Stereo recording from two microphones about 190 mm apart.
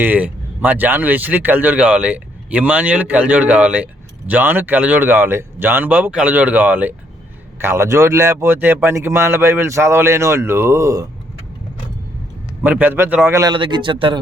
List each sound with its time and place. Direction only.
0.0 s speech: 10° right (ahead or behind)
12.6 s speech: 10° right (ahead or behind); by 14.2 s 25° right (ahead or behind)